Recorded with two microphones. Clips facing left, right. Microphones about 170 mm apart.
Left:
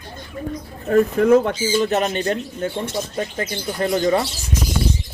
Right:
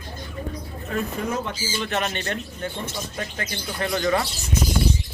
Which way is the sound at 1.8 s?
40° left (ahead or behind).